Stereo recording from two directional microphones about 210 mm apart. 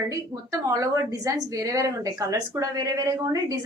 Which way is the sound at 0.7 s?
15° right (ahead or behind).